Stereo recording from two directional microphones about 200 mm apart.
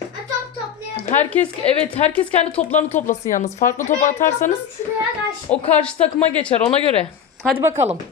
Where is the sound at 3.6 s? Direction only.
40° left (ahead or behind).